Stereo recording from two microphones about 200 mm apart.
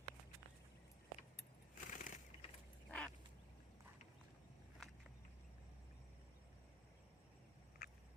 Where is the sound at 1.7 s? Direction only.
40° left (ahead or behind).